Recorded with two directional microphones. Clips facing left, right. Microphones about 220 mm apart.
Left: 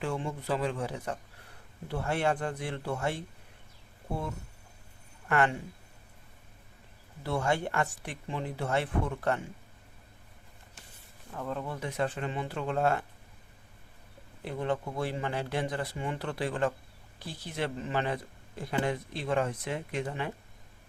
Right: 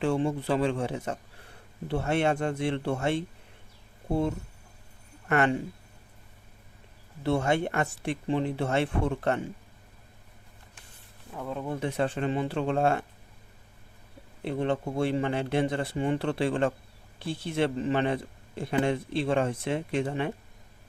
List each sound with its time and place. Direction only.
0.0 s a man's voice: 30° right (ahead or behind)
7.2 s a man's voice: 25° right (ahead or behind)
11.3 s speech: 5° right (ahead or behind)
11.6 s a man's voice: 25° right (ahead or behind)
14.4 s a man's voice: 25° right (ahead or behind)